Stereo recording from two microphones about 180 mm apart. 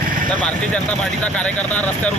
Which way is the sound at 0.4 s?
5° left (ahead or behind).